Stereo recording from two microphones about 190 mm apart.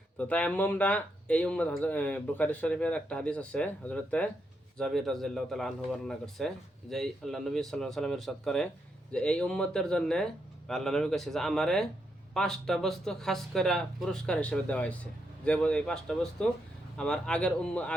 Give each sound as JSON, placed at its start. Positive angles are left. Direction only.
{"t": 0.2, "sound": "a man's voice", "side_deg": 5}